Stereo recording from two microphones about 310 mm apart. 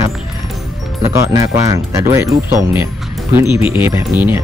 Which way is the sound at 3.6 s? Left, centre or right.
Centre.